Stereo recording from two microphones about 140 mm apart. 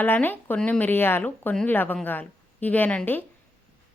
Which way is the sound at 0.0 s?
15° left (ahead or behind).